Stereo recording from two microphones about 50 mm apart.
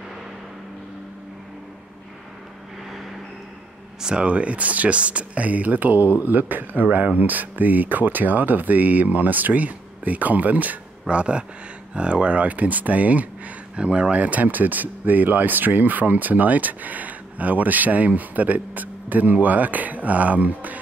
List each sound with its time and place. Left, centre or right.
4.0 s speech: centre